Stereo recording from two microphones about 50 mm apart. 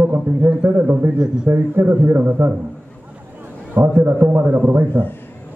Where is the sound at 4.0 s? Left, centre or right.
Right.